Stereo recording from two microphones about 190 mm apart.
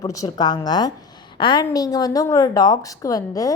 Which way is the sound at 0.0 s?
20° left (ahead or behind).